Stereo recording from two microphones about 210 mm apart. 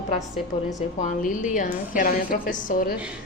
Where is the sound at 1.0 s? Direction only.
35° left (ahead or behind).